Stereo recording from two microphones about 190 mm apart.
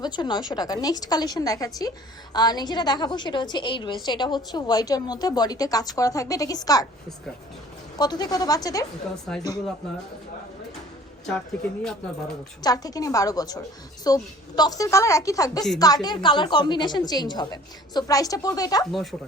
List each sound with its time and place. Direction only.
0.0 s a woman's voice: 25° left (ahead or behind)
7.9 s a woman's voice: 20° left (ahead or behind)
11.3 s speech: 5° left (ahead or behind)
12.6 s a woman's voice: 20° left (ahead or behind)